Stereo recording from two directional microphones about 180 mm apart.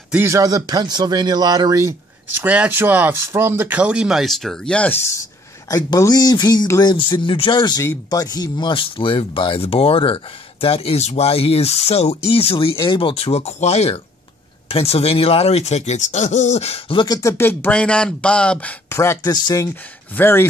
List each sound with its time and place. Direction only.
0.1 s speech: 15° right (ahead or behind); by 4.9 s 5° left (ahead or behind)
5.7 s speech: 20° left (ahead or behind)